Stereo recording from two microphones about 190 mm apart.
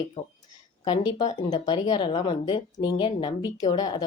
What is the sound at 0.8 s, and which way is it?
Speech, 25° left (ahead or behind).